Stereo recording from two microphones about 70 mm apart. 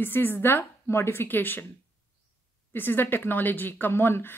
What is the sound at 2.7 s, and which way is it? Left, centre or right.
A woman's voice, left.